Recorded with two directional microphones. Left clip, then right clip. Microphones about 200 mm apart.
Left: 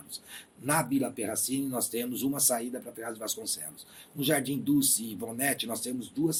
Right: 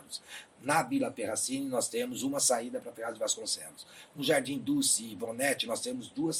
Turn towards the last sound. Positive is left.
turn(degrees=30)  # may be behind; listen again after turning